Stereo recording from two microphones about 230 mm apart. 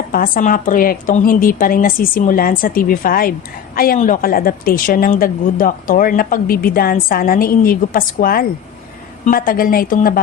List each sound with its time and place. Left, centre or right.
0.1 s a woman's voice: left